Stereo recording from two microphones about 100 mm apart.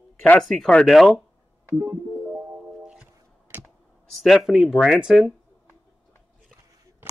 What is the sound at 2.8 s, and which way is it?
Music, 15° right (ahead or behind).